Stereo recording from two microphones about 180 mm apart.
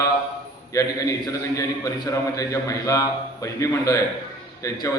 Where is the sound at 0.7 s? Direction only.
20° left (ahead or behind).